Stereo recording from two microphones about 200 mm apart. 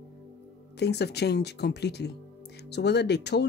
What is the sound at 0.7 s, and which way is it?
Speech, 55° left (ahead or behind).